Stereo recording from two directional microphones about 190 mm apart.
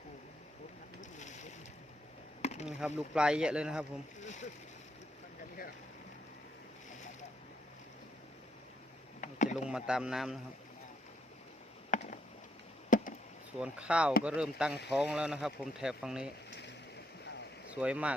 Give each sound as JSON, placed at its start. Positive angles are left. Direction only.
{"t": 2.4, "sound": "chop", "side_deg": 35}
{"t": 2.6, "sound": "speech", "side_deg": -5}
{"t": 4.2, "sound": "boat", "side_deg": 40}
{"t": 9.2, "sound": "a sound", "side_deg": 40}
{"t": 9.6, "sound": "speech", "side_deg": -5}
{"t": 11.9, "sound": "chop", "side_deg": 40}
{"t": 12.9, "sound": "a sound", "side_deg": 45}
{"t": 13.6, "sound": "speech", "side_deg": -5}
{"t": 17.7, "sound": "speech", "side_deg": -5}